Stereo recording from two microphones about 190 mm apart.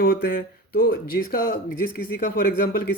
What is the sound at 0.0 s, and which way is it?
Speech, 50° left (ahead or behind).